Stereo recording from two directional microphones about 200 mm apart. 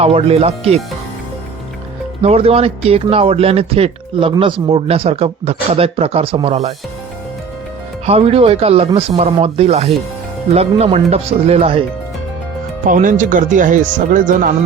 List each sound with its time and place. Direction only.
0.0 s speech: 30° right (ahead or behind)
2.2 s speech: 30° right (ahead or behind)
8.0 s speech: 30° right (ahead or behind)
12.8 s speech: 40° right (ahead or behind)